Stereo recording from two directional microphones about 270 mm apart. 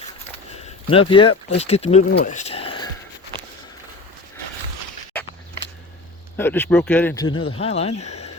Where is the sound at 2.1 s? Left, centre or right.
Left.